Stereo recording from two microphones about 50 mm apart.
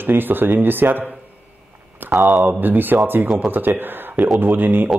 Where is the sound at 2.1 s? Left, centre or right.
Right.